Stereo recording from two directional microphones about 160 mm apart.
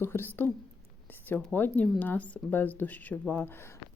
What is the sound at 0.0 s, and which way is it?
Speech, 15° left (ahead or behind).